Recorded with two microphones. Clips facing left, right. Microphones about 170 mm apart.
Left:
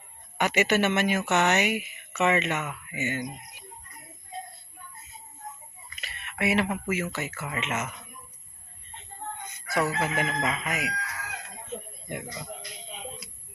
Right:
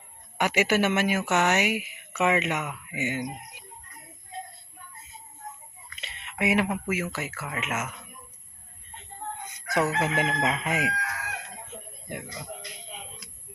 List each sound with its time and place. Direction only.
0.3 s speech: 10° right (ahead or behind)
6.0 s speech: 20° right (ahead or behind); by 7.9 s 5° right (ahead or behind)
9.4 s fowl: 15° right (ahead or behind)
10.0 s chicken: 20° right (ahead or behind)
12.0 s speech: 5° right (ahead or behind)
12.9 s music: 10° left (ahead or behind)